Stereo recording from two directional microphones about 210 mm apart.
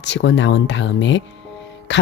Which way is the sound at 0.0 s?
55° left (ahead or behind).